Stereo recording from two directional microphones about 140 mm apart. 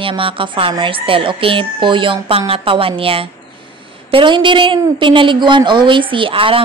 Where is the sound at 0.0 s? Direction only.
40° right (ahead or behind).